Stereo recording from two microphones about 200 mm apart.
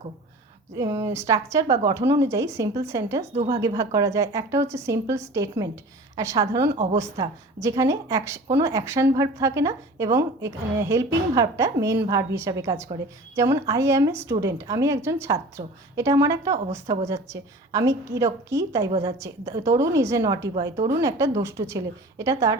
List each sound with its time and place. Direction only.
0.8 s a woman's voice: 15° right (ahead or behind)
18.9 s a woman's voice: 30° right (ahead or behind)
19.2 s a woman's voice: 15° right (ahead or behind)